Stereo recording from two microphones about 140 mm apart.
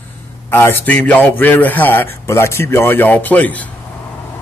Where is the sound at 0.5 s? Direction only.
15° left (ahead or behind).